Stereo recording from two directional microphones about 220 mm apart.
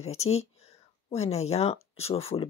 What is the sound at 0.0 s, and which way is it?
Speech, 30° left (ahead or behind).